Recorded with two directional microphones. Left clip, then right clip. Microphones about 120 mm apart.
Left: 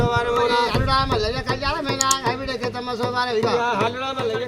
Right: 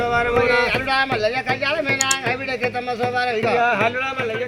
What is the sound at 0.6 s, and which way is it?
Speech, 50° left (ahead or behind).